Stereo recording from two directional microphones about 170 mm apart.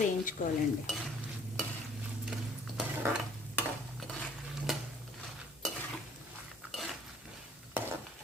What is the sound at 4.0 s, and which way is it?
Dishes, 5° left (ahead or behind).